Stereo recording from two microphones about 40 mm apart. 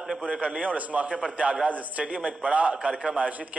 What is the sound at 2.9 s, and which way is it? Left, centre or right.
Speech, centre.